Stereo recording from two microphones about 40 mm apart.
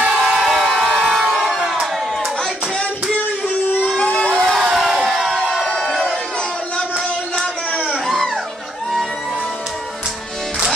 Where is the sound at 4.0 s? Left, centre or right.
Left.